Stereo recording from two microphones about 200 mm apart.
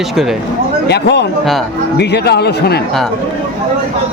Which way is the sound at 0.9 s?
60° left (ahead or behind).